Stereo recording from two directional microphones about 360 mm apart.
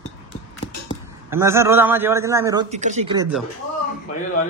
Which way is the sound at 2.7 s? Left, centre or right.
Centre.